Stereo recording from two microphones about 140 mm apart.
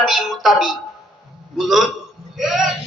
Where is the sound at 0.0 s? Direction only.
Centre (ahead or behind).